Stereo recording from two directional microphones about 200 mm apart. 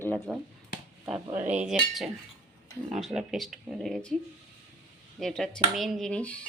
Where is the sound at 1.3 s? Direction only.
35° right (ahead or behind).